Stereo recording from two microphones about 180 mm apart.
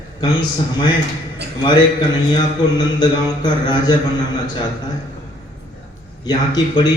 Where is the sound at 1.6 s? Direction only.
25° left (ahead or behind).